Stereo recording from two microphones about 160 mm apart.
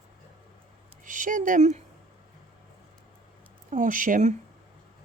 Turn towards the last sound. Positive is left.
turn(degrees=-50)  # may be behind; listen again after turning